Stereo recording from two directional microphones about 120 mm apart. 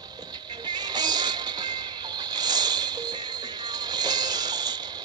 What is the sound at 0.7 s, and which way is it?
Music, 35° right (ahead or behind).